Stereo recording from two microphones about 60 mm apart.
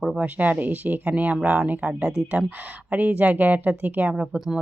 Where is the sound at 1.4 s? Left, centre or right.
Centre.